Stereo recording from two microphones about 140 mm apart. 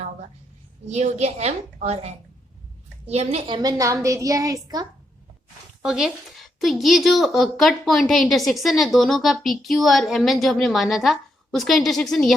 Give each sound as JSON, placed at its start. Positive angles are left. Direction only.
{"t": 0.9, "sound": "a woman's voice", "side_deg": -55}
{"t": 3.4, "sound": "a woman's voice", "side_deg": -30}
{"t": 5.8, "sound": "speech", "side_deg": -5}